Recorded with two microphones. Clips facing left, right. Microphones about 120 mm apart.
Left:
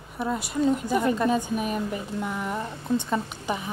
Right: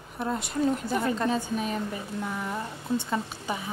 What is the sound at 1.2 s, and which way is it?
Speech, 15° left (ahead or behind).